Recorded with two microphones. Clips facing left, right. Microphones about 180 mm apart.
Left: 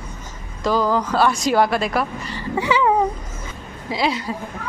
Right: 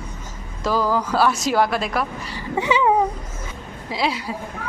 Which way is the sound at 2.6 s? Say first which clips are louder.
Even; 20° right (ahead or behind).